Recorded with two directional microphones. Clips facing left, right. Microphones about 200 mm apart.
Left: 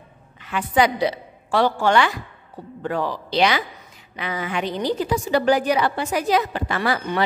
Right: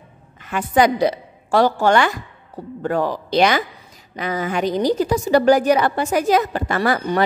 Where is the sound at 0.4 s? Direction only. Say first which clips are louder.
Right 3 dB; 45° right (ahead or behind).